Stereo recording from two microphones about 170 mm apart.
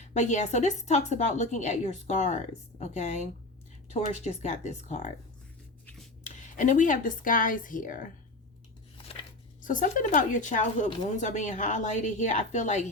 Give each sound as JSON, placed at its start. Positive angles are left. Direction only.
{"t": 0.0, "sound": "a woman's voice", "side_deg": 45}
{"t": 6.2, "sound": "speech", "side_deg": 45}
{"t": 9.6, "sound": "a woman's voice", "side_deg": 50}